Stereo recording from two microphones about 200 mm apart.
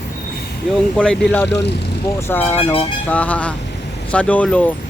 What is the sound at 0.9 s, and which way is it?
Speech, 5° left (ahead or behind).